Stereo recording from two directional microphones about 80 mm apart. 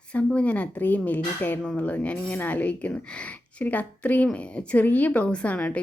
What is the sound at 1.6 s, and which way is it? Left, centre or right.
A woman's voice, centre.